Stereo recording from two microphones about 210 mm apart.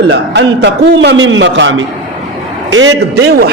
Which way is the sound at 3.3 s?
50° right (ahead or behind).